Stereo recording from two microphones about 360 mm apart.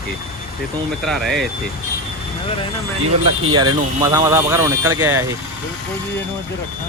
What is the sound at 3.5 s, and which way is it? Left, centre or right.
Speech, centre.